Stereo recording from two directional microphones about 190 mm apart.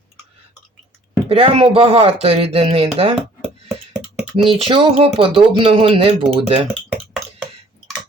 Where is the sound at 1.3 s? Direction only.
30° right (ahead or behind).